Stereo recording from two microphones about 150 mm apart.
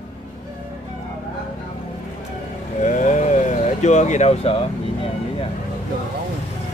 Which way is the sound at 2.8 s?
55° left (ahead or behind).